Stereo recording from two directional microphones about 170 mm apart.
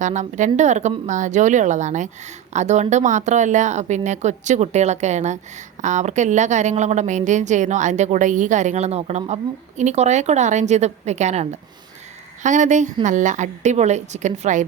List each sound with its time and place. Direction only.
0.0 s a woman's voice: 45° right (ahead or behind)